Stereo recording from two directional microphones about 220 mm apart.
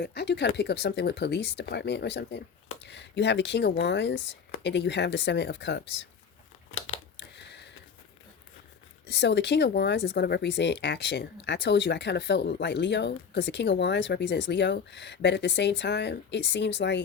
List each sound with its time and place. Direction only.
0.0 s speech: 50° left (ahead or behind)
6.7 s a sound: 65° left (ahead or behind)
9.0 s speech: 50° left (ahead or behind)